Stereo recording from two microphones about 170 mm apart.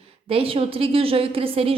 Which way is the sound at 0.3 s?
35° right (ahead or behind).